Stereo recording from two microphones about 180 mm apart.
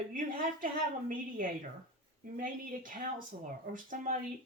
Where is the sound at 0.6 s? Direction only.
50° right (ahead or behind).